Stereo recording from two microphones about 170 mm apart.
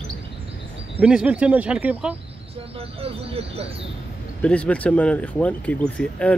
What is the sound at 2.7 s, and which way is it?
Speech, 35° right (ahead or behind).